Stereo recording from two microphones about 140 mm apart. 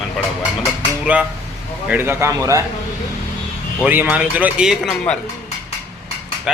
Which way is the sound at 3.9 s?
10° right (ahead or behind).